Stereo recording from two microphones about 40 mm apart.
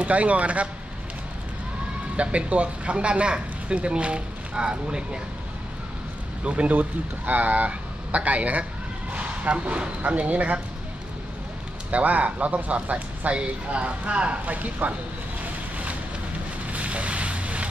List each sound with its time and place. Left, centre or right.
0.0 s speech: right
2.1 s speech: right
6.4 s speech: right
6.7 s speech: right
11.9 s speech: right
14.4 s speech: right
15.4 s vehicle: right
16.7 s boat: right